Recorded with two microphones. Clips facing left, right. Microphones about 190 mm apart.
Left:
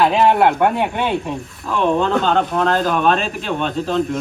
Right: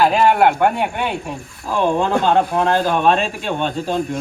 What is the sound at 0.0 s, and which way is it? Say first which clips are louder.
Speech: even; centre (ahead or behind).